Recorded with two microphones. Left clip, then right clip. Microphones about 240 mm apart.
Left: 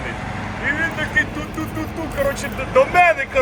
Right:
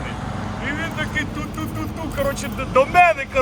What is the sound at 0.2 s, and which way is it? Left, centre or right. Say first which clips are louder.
Vehicle: left 3 dB; centre.